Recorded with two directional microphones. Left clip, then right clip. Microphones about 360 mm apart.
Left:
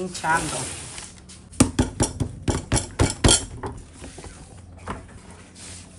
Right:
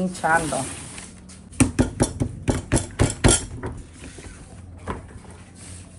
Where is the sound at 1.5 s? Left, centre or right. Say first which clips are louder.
Even; centre.